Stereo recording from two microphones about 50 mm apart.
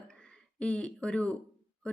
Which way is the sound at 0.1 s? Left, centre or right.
Left.